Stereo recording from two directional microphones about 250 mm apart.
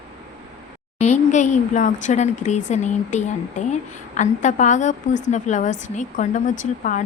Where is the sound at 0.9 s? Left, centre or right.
Left.